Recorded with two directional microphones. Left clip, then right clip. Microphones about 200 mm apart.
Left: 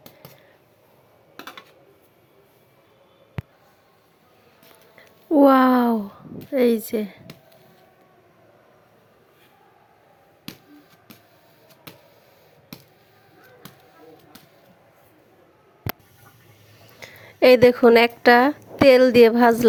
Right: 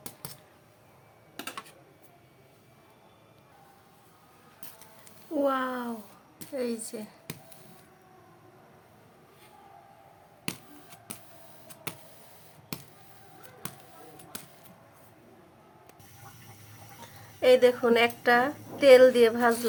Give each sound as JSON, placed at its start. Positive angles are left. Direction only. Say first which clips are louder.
{"t": 5.4, "sound": "a sound", "louder": "left 13 dB", "side_deg": 35}
{"t": 6.5, "sound": "speech", "louder": "left 14 dB", "side_deg": 30}
{"t": 17.0, "sound": "speech", "louder": "left 10 dB", "side_deg": 35}